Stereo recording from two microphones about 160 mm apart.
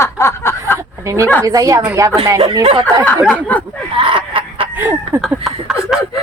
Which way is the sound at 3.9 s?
30° right (ahead or behind).